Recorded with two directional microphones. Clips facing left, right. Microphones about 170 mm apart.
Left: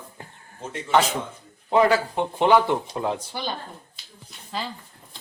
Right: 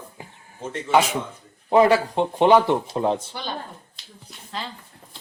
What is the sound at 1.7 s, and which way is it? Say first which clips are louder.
Speech: right 3 dB; 20° right (ahead or behind).